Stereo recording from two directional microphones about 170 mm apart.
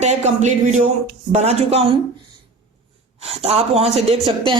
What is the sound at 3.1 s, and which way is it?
A woman's voice, 35° right (ahead or behind).